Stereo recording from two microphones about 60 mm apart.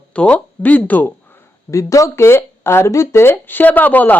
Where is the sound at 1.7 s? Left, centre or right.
Left.